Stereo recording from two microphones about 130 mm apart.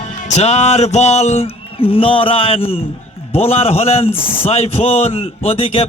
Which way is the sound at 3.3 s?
50° left (ahead or behind).